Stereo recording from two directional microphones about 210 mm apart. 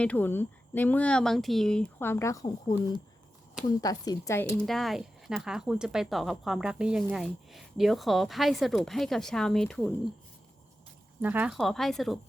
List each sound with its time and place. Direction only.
0.0 s speech: 10° left (ahead or behind)
3.8 s speech: 20° left (ahead or behind)
4.6 s speech: centre (ahead or behind)
11.2 s speech: 10° right (ahead or behind)